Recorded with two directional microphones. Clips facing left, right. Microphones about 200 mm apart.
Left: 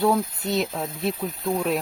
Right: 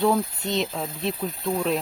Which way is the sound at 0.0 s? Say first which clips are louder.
Even; 5° left (ahead or behind).